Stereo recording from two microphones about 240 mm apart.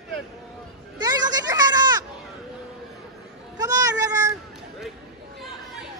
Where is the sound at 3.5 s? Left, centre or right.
Centre.